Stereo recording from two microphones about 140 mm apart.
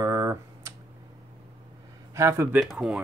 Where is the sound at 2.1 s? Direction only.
20° right (ahead or behind).